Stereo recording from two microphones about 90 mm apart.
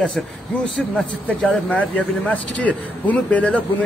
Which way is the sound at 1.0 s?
15° left (ahead or behind).